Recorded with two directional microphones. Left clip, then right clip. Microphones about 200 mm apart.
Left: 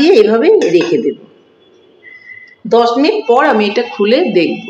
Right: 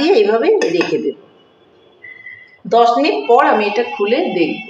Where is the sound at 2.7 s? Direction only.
45° left (ahead or behind).